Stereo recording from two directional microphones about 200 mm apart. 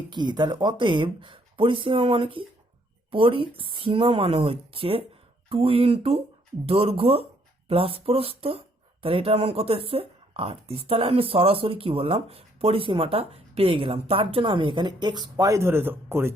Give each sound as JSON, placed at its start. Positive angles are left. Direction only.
{"t": 0.1, "sound": "speech", "side_deg": -20}